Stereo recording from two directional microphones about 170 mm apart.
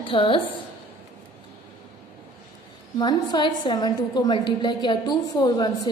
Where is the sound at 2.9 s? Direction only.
25° left (ahead or behind).